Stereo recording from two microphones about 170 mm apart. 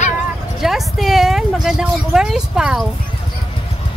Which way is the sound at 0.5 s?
Centre (ahead or behind).